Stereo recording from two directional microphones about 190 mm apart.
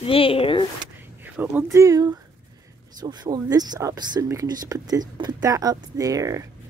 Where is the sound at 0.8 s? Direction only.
10° right (ahead or behind).